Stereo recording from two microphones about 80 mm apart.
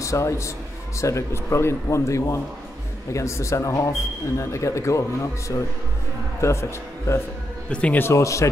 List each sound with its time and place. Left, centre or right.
0.0 s a man's voice: left
7.7 s speech: centre
8.0 s speech: left